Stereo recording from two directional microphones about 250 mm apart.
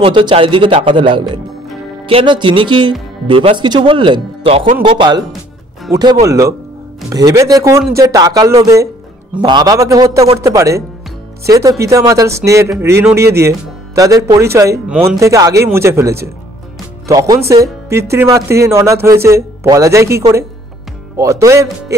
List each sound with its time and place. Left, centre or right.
0.0 s speech: centre